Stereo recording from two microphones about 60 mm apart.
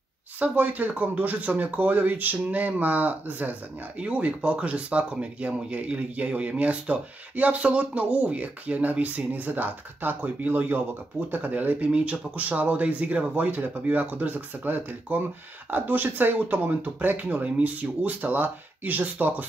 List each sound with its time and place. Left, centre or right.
0.4 s speech: right